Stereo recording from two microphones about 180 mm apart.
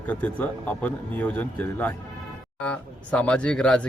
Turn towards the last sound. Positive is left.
turn(degrees=5)  # may be behind; listen again after turning